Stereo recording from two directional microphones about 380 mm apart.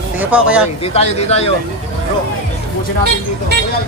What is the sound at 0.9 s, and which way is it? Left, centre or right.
Speech, centre.